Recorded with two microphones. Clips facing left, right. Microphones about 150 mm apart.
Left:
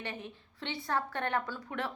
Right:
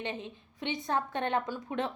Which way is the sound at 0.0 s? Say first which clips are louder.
Right 4 dB; 20° right (ahead or behind).